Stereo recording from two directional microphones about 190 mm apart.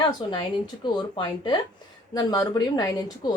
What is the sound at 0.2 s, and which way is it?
A woman's voice, 25° left (ahead or behind).